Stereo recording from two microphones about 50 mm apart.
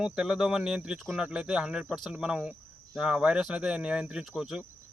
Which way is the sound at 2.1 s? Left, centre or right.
Centre.